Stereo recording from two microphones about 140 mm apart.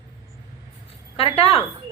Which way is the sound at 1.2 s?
45° left (ahead or behind).